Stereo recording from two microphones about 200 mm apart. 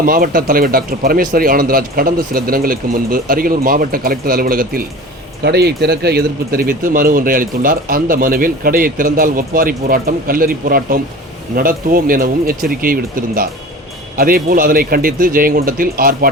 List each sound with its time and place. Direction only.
0.0 s speech: 45° right (ahead or behind)